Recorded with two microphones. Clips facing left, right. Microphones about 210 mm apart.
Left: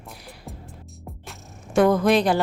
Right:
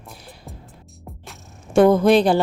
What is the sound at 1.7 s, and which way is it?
Speech, 25° right (ahead or behind).